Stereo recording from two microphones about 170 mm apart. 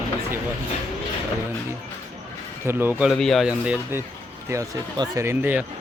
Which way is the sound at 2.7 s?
15° right (ahead or behind).